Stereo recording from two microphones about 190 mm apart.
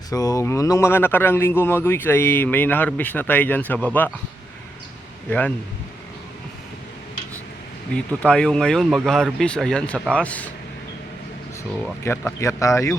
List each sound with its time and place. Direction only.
0.1 s a man's voice: 20° left (ahead or behind)
7.9 s speech: 5° left (ahead or behind)
12.0 s a man's voice: 10° left (ahead or behind)